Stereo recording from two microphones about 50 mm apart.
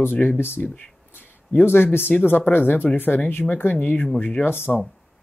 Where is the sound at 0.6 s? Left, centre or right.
Left.